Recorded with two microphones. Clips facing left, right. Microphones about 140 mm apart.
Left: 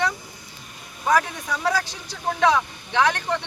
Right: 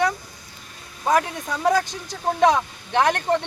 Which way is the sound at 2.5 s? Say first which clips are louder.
Left 2 dB; 45° right (ahead or behind).